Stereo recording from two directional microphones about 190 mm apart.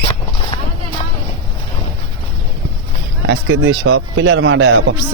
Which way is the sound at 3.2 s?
75° right (ahead or behind).